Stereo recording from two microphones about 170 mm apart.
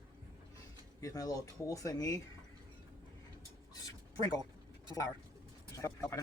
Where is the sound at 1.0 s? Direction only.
20° left (ahead or behind).